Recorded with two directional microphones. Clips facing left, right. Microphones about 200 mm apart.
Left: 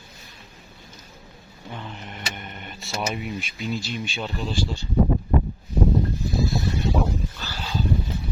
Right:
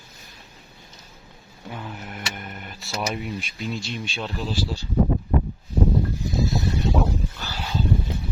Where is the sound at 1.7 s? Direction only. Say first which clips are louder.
Right 2 dB; 5° right (ahead or behind).